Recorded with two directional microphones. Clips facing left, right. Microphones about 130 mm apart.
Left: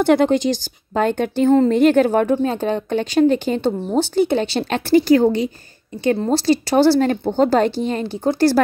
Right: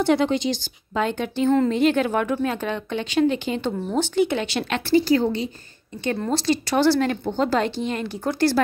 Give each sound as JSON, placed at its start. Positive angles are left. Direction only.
{"t": 0.0, "sound": "a woman's voice", "side_deg": 50}
{"t": 6.0, "sound": "speech", "side_deg": 35}